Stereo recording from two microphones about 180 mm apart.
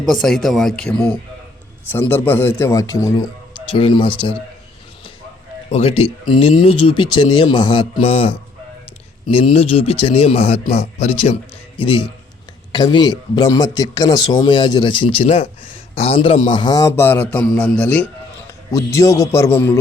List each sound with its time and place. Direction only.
0.0 s a man's voice: centre (ahead or behind); by 4.4 s 30° left (ahead or behind)
5.7 s a man's voice: 35° left (ahead or behind); by 19.8 s 15° left (ahead or behind)